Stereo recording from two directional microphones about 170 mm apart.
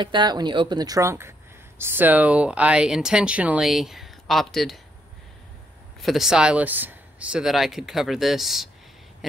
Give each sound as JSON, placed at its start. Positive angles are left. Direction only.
{"t": 0.0, "sound": "speech", "side_deg": -25}
{"t": 5.9, "sound": "speech", "side_deg": 0}